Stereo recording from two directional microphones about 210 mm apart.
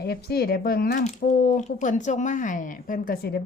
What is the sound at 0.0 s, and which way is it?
Speech, 50° left (ahead or behind).